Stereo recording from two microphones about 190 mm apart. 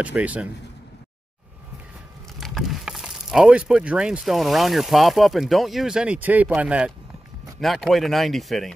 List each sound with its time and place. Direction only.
0.0 s a man's voice: 5° right (ahead or behind)
2.4 s speech: centre (ahead or behind)